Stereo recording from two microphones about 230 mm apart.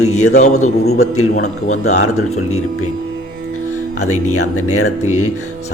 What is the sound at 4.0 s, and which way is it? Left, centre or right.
Speech, left.